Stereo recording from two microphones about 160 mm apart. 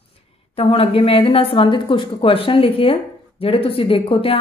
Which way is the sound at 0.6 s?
35° left (ahead or behind).